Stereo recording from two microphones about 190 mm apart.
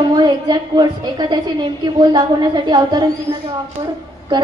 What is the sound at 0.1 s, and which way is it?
A woman's voice, 20° right (ahead or behind).